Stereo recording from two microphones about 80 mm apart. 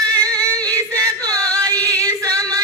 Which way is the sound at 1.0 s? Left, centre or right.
Right.